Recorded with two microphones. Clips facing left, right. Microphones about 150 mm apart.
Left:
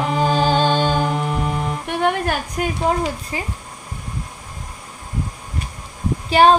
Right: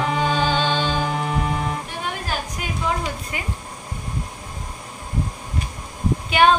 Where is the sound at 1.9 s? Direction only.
60° left (ahead or behind).